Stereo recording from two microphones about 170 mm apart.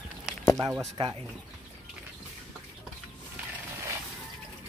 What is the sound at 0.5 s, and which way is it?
Speech, 15° right (ahead or behind).